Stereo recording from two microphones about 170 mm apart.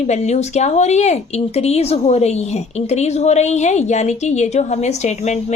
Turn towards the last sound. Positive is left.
turn(degrees=40)  # may be behind; listen again after turning